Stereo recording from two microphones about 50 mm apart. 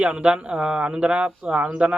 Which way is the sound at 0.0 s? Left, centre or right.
Right.